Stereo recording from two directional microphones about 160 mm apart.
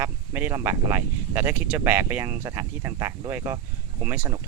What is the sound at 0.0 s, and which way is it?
Speech, 15° right (ahead or behind).